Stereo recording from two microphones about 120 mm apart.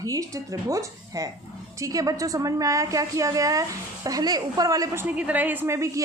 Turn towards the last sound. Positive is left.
turn(degrees=-25)  # may be behind; listen again after turning